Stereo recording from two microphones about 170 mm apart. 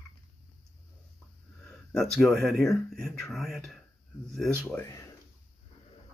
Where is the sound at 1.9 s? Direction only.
Centre (ahead or behind).